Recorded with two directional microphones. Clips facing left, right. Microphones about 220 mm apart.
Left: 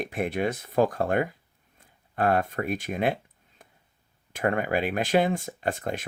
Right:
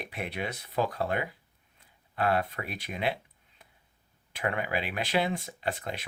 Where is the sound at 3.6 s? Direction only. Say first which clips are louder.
Left 5 dB; 45° left (ahead or behind).